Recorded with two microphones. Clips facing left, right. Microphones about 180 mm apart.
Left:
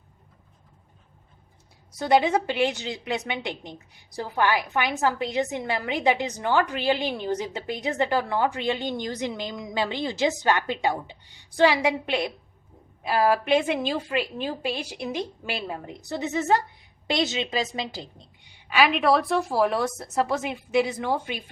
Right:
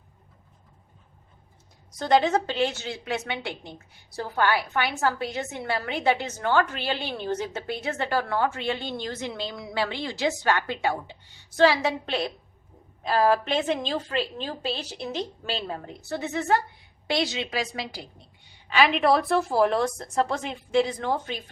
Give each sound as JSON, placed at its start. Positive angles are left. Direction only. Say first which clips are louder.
{"t": 2.0, "sound": "a woman's voice", "louder": "left 1 dB", "side_deg": 10}
{"t": 18.7, "sound": "a woman's voice", "louder": "even", "side_deg": 0}